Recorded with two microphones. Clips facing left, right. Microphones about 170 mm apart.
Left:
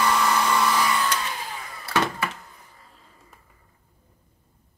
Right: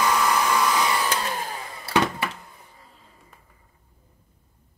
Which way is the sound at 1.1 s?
45° right (ahead or behind).